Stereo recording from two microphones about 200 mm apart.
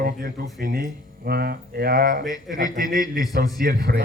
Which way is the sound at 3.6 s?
50° right (ahead or behind).